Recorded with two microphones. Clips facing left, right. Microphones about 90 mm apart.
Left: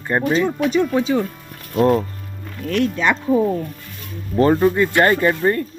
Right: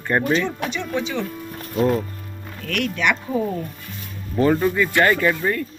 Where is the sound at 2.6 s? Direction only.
30° left (ahead or behind).